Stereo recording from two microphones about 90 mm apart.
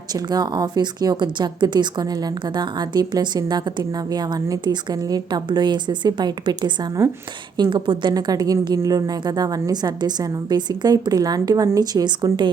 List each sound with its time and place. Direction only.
0.1 s a woman's voice: 50° right (ahead or behind)
4.6 s a woman's voice: 55° right (ahead or behind)
8.1 s a woman's voice: 45° right (ahead or behind)